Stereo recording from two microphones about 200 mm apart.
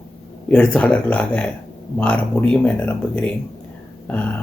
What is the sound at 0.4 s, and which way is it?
Speech, 5° left (ahead or behind).